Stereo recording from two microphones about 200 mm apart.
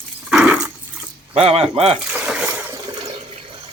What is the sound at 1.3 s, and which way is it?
Speech, 30° right (ahead or behind).